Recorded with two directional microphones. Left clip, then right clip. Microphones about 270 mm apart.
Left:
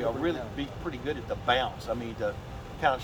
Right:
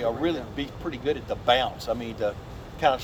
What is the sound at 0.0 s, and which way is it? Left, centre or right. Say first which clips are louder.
Speech: right 3 dB; right.